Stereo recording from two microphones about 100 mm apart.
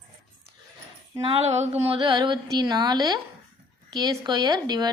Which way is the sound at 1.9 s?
50° right (ahead or behind).